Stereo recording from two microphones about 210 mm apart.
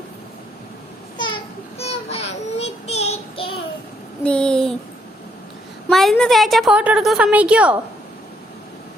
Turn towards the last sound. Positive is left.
turn(degrees=-5)  # may be behind; listen again after turning